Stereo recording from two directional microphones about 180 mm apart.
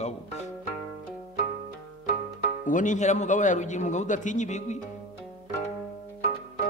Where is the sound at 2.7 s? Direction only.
45° left (ahead or behind).